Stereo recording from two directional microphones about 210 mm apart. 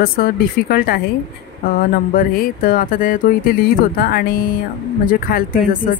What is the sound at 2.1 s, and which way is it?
Speech, 40° left (ahead or behind).